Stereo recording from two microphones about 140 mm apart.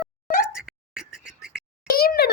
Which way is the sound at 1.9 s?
90° left.